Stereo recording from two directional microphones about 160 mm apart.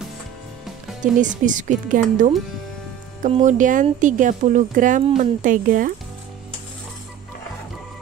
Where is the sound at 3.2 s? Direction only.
45° right (ahead or behind).